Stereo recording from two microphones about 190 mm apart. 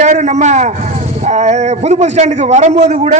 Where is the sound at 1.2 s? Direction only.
35° right (ahead or behind).